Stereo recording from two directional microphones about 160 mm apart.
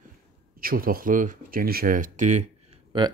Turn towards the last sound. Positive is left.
turn(degrees=-30)  # may be behind; listen again after turning